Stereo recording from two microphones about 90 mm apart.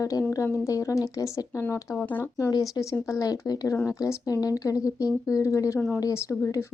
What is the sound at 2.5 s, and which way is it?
Speech, 40° left (ahead or behind).